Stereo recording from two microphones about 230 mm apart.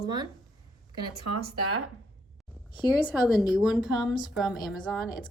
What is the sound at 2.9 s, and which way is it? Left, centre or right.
A woman's voice, centre.